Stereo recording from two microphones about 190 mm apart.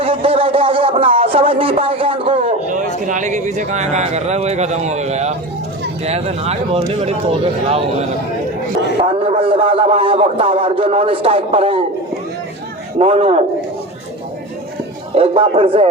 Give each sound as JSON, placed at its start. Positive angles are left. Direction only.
{"t": 0.0, "sound": "a sound", "side_deg": -30}
{"t": 3.1, "sound": "speech", "side_deg": -40}
{"t": 9.0, "sound": "a man's voice", "side_deg": -30}
{"t": 13.0, "sound": "speech", "side_deg": -30}
{"t": 15.1, "sound": "speech", "side_deg": -30}